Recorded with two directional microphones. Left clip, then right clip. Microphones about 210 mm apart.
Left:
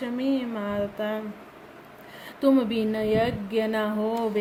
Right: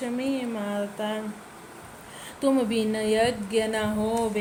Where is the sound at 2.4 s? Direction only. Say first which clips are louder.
Left 1 dB; 30° left (ahead or behind).